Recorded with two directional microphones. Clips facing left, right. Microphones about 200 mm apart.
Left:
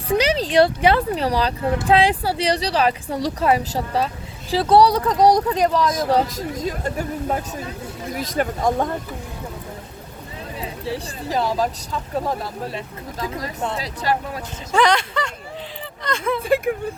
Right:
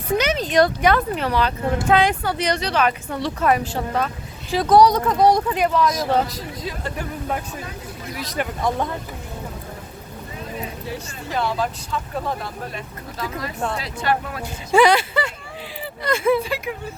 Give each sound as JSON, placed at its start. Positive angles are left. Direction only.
{"t": 0.1, "sound": "speech", "side_deg": 30}
{"t": 7.3, "sound": "speech", "side_deg": 30}
{"t": 8.1, "sound": "speech", "side_deg": 50}
{"t": 10.8, "sound": "speech", "side_deg": 35}
{"t": 13.1, "sound": "speech", "side_deg": 20}
{"t": 13.8, "sound": "speech", "side_deg": 35}
{"t": 14.7, "sound": "speech", "side_deg": -10}
{"t": 16.4, "sound": "speech", "side_deg": 55}